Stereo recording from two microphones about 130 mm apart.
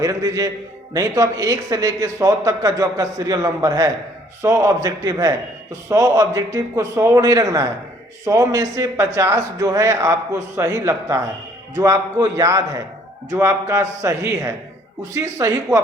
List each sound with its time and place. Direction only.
0.0 s a man's voice: 25° right (ahead or behind)